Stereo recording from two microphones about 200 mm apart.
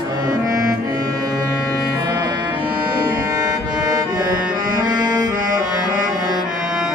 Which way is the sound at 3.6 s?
20° right (ahead or behind).